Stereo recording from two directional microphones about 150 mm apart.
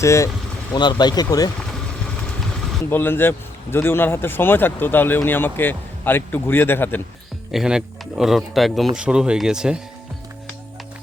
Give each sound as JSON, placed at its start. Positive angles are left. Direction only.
{"t": 0.0, "sound": "speech", "side_deg": 20}
{"t": 2.9, "sound": "a man's voice", "side_deg": 15}
{"t": 7.5, "sound": "speech", "side_deg": -5}